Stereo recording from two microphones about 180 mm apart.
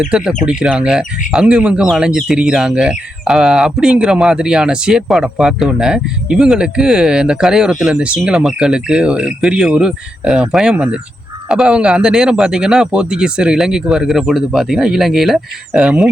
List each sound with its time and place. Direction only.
0.0 s speech: 5° right (ahead or behind)